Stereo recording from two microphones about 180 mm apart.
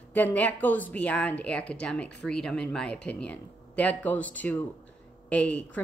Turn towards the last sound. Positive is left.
turn(degrees=5)  # may be behind; listen again after turning